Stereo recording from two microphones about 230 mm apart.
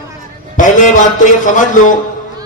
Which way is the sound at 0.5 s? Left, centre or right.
Left.